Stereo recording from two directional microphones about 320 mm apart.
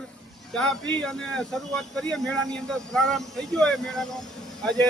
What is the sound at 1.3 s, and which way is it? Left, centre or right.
Speech, centre.